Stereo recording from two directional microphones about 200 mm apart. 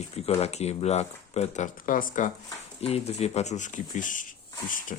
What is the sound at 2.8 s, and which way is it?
Speech, 30° left (ahead or behind).